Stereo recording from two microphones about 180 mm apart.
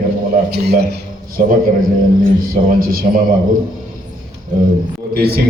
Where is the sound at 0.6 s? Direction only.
65° right (ahead or behind).